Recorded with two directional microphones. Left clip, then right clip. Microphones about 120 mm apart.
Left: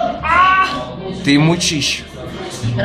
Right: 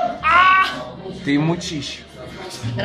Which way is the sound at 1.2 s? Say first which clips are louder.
Left 6 dB; 15° left (ahead or behind).